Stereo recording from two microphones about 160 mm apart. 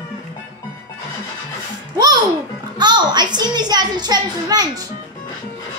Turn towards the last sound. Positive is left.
turn(degrees=-25)  # may be behind; listen again after turning